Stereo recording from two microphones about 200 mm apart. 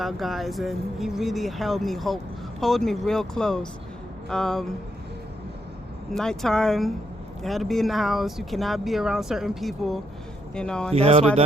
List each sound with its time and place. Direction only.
0.0 s speech: centre (ahead or behind)
6.1 s speech: centre (ahead or behind)
10.9 s speech: 30° right (ahead or behind)